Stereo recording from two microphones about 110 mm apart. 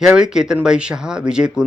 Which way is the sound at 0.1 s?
5° right (ahead or behind).